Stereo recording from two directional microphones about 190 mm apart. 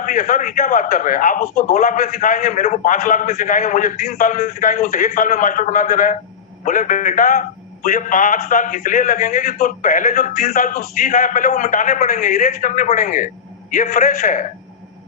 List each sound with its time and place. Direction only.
0.0 s a man's voice: 40° left (ahead or behind)